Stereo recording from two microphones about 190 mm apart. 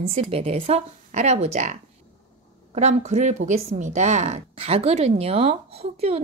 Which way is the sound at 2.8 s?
35° right (ahead or behind).